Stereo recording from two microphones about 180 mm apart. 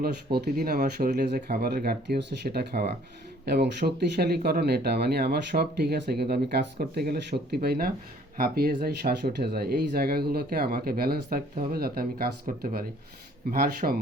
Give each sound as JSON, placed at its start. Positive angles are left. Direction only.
{"t": 0.4, "sound": "speech", "side_deg": -60}
{"t": 13.5, "sound": "speech", "side_deg": -55}